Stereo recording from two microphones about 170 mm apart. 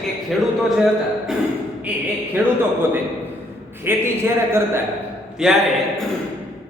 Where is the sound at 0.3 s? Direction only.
Centre (ahead or behind).